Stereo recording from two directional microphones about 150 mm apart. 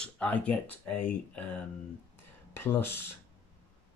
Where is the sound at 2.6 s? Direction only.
15° left (ahead or behind).